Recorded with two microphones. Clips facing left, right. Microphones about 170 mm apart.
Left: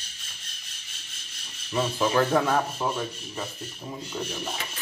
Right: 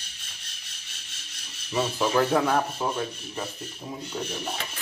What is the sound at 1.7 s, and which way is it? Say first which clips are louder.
Rub: even; 5° right (ahead or behind).